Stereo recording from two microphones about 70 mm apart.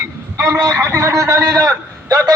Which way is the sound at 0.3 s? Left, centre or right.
Right.